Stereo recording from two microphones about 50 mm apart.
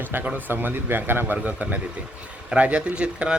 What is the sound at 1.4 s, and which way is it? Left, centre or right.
Speech, right.